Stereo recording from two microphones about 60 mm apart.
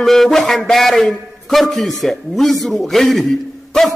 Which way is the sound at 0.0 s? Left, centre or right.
Centre.